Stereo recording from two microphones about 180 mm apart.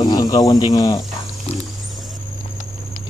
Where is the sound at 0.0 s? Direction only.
20° left (ahead or behind).